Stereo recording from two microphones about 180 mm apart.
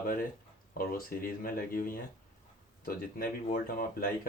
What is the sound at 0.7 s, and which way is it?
Speech, 50° left (ahead or behind).